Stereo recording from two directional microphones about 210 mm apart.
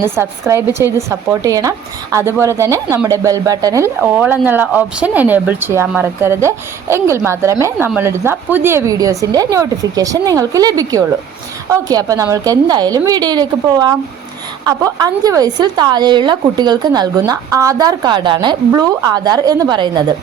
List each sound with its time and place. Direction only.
0.0 s speech: 10° right (ahead or behind)